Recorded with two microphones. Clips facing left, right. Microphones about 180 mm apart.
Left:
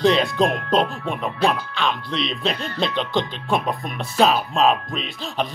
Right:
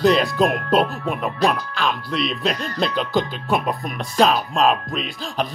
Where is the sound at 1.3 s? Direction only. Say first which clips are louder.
Even; 40° right (ahead or behind).